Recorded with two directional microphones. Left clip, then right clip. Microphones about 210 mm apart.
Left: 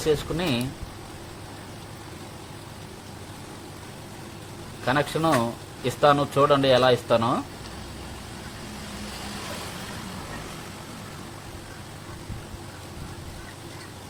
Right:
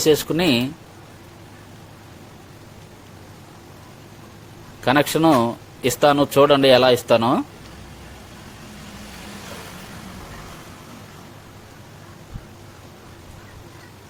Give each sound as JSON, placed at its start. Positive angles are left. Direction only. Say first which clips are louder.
{"t": 0.0, "sound": "speech", "louder": "right 7 dB", "side_deg": -45}
{"t": 4.9, "sound": "speech", "louder": "right 7 dB", "side_deg": -40}